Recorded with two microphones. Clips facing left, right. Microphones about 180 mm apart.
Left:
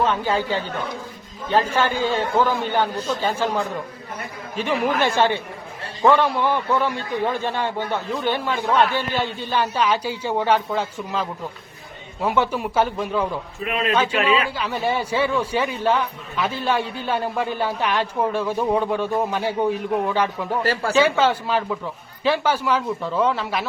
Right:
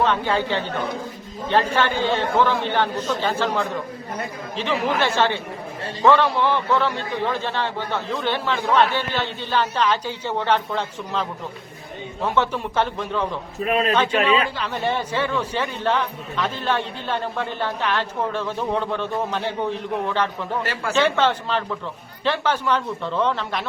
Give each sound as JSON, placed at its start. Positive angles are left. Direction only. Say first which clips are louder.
{"t": 0.0, "sound": "a man's voice", "louder": "even", "side_deg": 10}
{"t": 13.7, "sound": "speech", "louder": "right 3 dB", "side_deg": -40}
{"t": 14.5, "sound": "a man's voice", "louder": "left 1 dB", "side_deg": 10}